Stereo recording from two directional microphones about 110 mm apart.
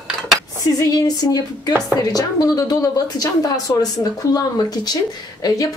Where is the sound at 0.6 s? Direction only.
35° left (ahead or behind).